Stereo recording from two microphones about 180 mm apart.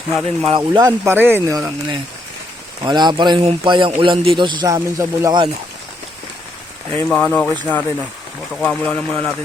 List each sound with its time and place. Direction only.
0.4 s a man's voice: 25° right (ahead or behind)
6.9 s speech: 10° left (ahead or behind)